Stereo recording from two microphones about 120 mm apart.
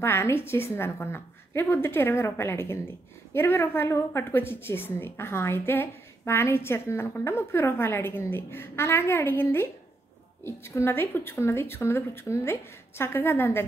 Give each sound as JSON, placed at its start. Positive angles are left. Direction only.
{"t": 0.0, "sound": "speech", "side_deg": 20}